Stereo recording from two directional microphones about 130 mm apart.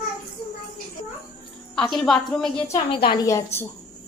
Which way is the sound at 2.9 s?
40° left (ahead or behind).